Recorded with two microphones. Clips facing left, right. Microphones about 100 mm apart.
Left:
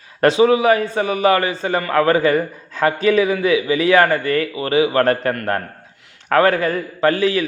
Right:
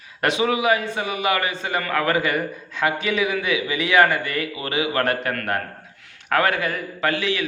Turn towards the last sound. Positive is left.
turn(degrees=40)  # may be behind; listen again after turning